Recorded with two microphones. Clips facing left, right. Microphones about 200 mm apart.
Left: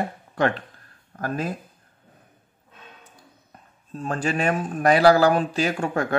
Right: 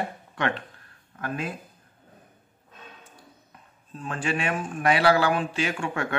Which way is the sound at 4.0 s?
40° left (ahead or behind).